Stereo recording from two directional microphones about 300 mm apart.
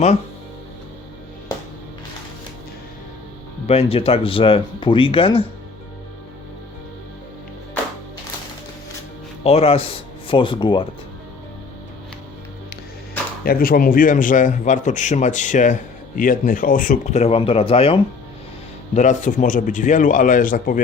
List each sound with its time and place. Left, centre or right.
3.7 s speech: centre
9.4 s speech: centre
13.4 s a man's voice: left